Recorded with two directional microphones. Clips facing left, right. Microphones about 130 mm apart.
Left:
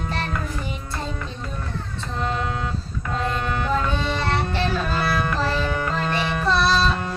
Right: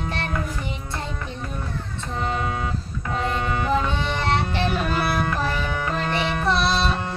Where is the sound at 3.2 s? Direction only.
15° right (ahead or behind).